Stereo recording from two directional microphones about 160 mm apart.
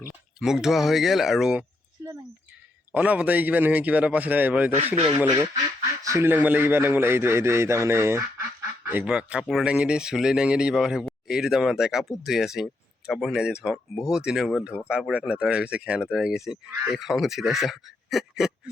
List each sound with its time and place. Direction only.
0.3 s speech: 5° right (ahead or behind)
2.9 s a man's voice: 10° right (ahead or behind)
6.0 s a man's voice: 20° right (ahead or behind); by 18.7 s centre (ahead or behind)